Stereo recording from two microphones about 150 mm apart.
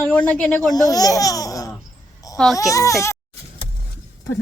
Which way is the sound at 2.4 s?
5° left (ahead or behind).